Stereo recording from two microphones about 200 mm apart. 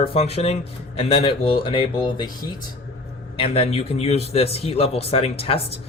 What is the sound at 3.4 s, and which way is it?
A man's voice, 30° left (ahead or behind).